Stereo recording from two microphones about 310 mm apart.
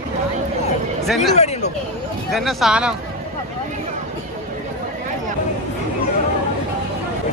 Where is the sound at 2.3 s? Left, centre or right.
Centre.